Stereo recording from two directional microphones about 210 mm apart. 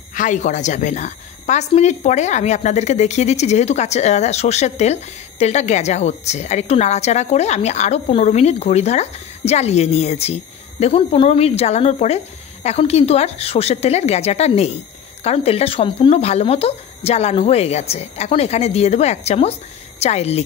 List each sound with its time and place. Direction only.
0.1 s a woman's voice: 35° left (ahead or behind)